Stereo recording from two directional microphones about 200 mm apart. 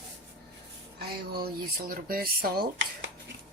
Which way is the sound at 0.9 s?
50° right (ahead or behind).